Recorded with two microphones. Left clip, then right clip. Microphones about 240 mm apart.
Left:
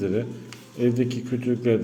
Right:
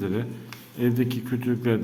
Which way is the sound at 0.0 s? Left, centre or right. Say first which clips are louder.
Left 3 dB; centre.